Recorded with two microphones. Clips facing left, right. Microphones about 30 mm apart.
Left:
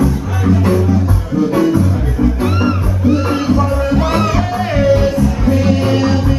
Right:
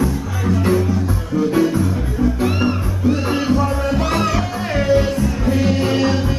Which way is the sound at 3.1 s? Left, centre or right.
Centre.